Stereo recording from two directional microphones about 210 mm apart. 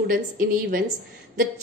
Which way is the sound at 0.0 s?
40° right (ahead or behind).